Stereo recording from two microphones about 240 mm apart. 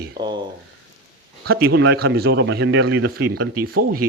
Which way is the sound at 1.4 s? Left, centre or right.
Right.